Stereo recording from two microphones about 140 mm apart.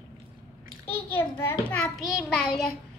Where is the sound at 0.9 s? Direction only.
15° left (ahead or behind).